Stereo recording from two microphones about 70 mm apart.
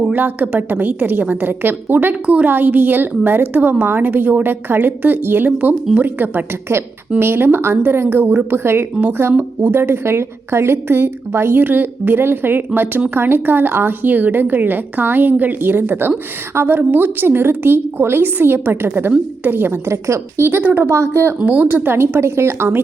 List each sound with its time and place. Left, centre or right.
0.1 s a woman's voice: right
20.5 s a woman's voice: right
20.8 s a woman's voice: right
21.4 s a woman's voice: right
21.7 s a woman's voice: right